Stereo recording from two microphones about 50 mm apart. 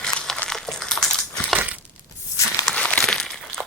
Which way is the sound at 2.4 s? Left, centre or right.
Left.